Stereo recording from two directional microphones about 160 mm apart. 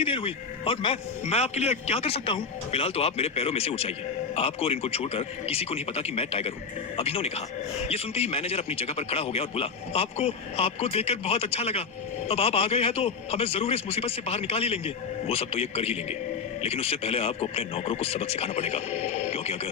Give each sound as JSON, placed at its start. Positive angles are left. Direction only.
{"t": 0.0, "sound": "speech", "side_deg": 35}